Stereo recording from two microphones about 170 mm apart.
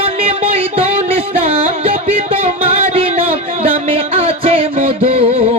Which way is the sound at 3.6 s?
35° right (ahead or behind).